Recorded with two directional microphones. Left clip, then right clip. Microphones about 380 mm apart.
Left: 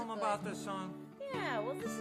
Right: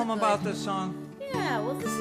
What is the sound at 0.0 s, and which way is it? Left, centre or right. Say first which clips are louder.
Music: right 10 dB; right.